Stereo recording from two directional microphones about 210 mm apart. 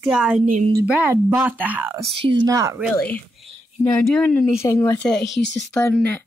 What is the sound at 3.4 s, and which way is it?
Speech, 5° left (ahead or behind).